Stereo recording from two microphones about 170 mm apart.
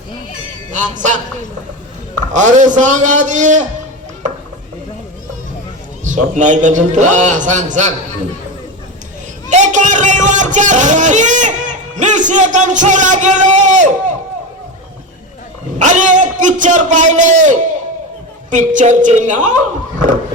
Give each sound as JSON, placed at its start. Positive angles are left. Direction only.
{"t": 0.7, "sound": "a man's voice", "side_deg": -45}
{"t": 2.3, "sound": "a man's voice", "side_deg": -45}
{"t": 6.1, "sound": "a man's voice", "side_deg": -45}
{"t": 9.5, "sound": "a man's voice", "side_deg": -45}
{"t": 15.8, "sound": "a man's voice", "side_deg": -45}